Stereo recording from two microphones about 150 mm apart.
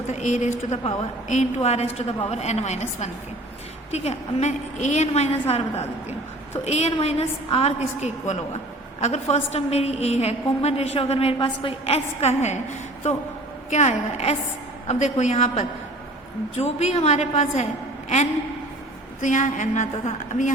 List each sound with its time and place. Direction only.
0.1 s a woman's voice: 50° left (ahead or behind)
9.0 s a woman's voice: 45° left (ahead or behind)
13.7 s a woman's voice: 50° left (ahead or behind)
19.2 s a woman's voice: 55° left (ahead or behind)